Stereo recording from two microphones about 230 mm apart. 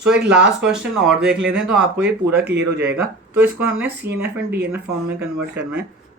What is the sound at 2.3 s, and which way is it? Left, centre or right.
Speech, right.